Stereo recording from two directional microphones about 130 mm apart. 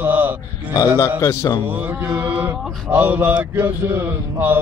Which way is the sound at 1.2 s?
25° left (ahead or behind).